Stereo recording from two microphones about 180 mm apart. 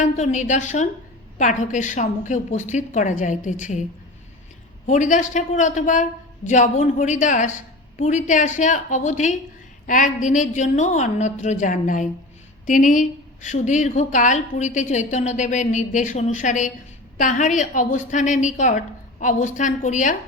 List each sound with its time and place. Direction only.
0.0 s a woman's voice: 40° left (ahead or behind)
4.9 s speech: 45° left (ahead or behind)